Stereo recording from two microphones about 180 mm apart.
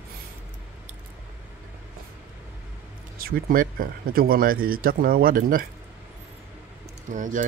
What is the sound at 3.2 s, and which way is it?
Speech, 55° right (ahead or behind).